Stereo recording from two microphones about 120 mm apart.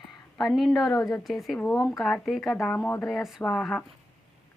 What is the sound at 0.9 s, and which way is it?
Speech, 25° left (ahead or behind).